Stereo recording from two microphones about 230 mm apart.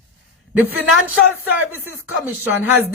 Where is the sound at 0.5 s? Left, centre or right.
Centre.